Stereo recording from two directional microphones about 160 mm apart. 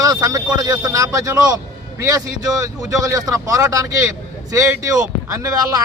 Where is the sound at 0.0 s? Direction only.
20° right (ahead or behind).